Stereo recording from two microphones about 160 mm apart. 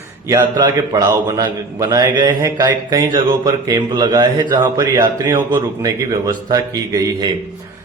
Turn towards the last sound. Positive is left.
turn(degrees=-20)  # may be behind; listen again after turning